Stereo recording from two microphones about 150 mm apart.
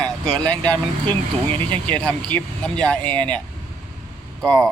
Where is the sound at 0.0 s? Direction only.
5° left (ahead or behind).